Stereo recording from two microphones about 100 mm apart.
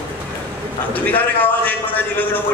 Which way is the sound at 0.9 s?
15° left (ahead or behind).